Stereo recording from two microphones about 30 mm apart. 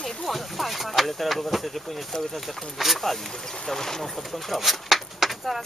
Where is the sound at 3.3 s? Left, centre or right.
Centre.